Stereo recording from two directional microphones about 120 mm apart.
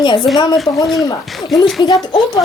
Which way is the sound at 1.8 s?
35° left (ahead or behind).